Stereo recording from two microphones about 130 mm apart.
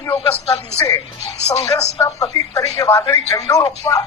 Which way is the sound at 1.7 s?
25° left (ahead or behind).